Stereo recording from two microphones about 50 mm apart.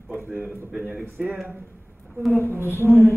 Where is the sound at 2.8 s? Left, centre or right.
Centre.